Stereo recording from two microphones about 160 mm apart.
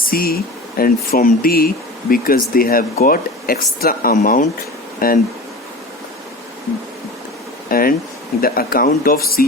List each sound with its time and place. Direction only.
0.0 s speech: 65° left (ahead or behind)
7.7 s speech: 65° left (ahead or behind)